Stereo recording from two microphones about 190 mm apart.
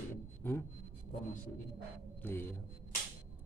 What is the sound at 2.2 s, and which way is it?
Speech, 10° left (ahead or behind).